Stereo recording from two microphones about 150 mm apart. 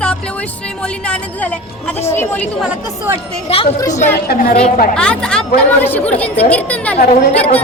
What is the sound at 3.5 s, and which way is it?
Speech, 45° left (ahead or behind).